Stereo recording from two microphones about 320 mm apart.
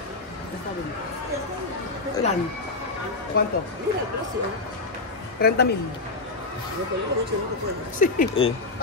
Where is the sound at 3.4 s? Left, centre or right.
Left.